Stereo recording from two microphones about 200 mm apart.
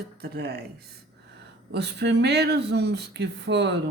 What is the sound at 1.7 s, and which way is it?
A woman's voice, 55° right (ahead or behind).